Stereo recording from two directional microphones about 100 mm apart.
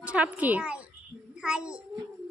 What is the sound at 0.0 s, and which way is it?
A child's voice, 15° right (ahead or behind).